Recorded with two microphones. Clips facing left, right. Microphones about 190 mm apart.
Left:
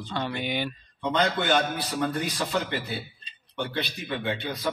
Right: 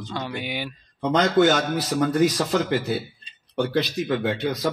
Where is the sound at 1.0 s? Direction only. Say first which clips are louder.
Right 7 dB; 90° right.